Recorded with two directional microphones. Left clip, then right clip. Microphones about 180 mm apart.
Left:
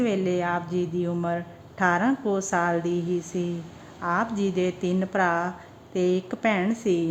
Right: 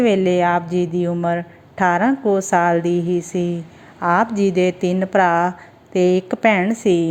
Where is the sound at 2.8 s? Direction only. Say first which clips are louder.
Right 8 dB; 10° right (ahead or behind).